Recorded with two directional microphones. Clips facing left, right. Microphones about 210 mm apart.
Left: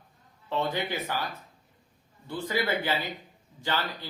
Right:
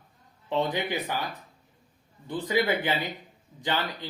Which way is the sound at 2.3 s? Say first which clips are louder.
Right 3 dB; 15° right (ahead or behind).